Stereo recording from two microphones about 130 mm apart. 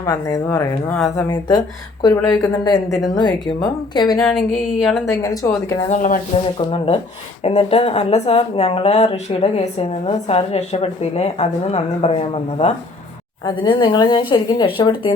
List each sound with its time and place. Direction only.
0.0 s speech: 25° left (ahead or behind)
0.9 s music: 5° left (ahead or behind)
1.3 s a woman's voice: 30° left (ahead or behind)
4.2 s music: centre (ahead or behind)
5.0 s speech: 25° left (ahead or behind)
5.9 s speech: 85° left
6.7 s speech: 45° left (ahead or behind)
13.4 s a woman's voice: 35° left (ahead or behind)